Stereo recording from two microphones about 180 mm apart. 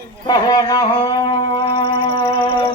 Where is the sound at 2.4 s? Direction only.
30° left (ahead or behind).